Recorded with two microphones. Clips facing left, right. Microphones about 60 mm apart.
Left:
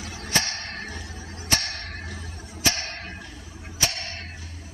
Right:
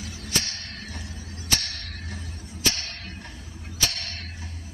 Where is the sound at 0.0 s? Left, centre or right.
Left.